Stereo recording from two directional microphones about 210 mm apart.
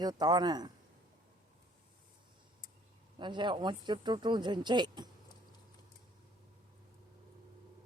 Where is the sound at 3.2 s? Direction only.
20° right (ahead or behind).